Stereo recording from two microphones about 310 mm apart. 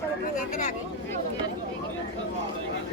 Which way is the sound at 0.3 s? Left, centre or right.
Left.